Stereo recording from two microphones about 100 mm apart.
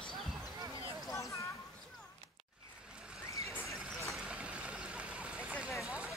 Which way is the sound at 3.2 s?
30° left (ahead or behind).